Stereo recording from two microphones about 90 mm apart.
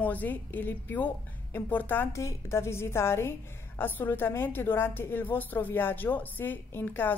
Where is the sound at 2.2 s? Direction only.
35° left (ahead or behind).